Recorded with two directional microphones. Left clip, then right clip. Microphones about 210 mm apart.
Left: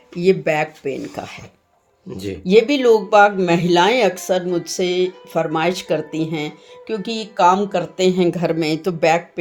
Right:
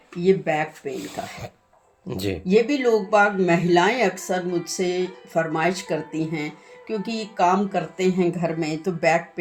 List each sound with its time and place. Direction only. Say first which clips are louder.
0.2 s speech: left 4 dB; 50° left (ahead or behind)
2.0 s speech: right 1 dB; 25° right (ahead or behind)
2.5 s speech: left 6 dB; 40° left (ahead or behind)